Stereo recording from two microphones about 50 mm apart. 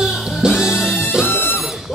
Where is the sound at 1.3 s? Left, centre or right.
Left.